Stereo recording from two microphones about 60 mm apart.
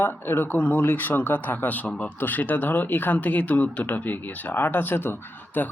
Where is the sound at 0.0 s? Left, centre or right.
Left.